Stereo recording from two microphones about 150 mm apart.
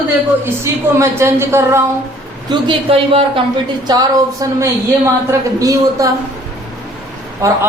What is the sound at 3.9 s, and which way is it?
A woman's voice, 25° right (ahead or behind).